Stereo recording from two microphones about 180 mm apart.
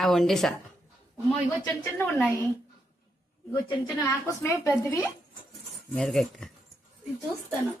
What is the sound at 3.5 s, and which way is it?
A woman's voice, 20° left (ahead or behind).